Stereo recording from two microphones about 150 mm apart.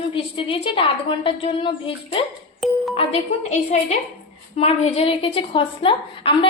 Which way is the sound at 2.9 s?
40° left (ahead or behind).